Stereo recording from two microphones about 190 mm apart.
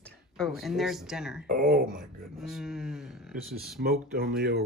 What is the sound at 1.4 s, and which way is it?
Speech, 45° right (ahead or behind).